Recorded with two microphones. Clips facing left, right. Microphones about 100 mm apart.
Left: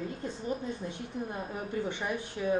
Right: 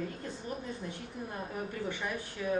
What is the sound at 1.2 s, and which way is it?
A woman's voice, 25° left (ahead or behind).